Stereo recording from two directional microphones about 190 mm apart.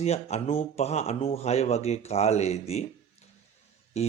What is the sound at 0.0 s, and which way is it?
Speech, 35° left (ahead or behind).